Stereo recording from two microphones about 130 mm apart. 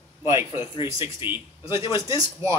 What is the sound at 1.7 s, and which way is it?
Speech, 35° left (ahead or behind).